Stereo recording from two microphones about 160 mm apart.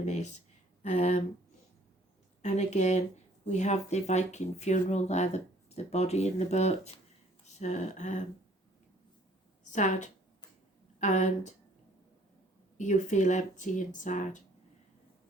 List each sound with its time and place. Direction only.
0.0 s a sound: 45° left (ahead or behind)
2.4 s speech: 45° left (ahead or behind)
9.7 s speech: 50° left (ahead or behind)
12.7 s speech: 50° left (ahead or behind)